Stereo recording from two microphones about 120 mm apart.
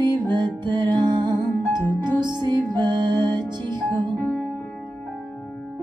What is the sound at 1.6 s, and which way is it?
Music, 15° left (ahead or behind).